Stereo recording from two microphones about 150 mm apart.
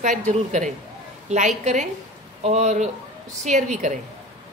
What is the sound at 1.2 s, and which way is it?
A woman's voice, 50° right (ahead or behind).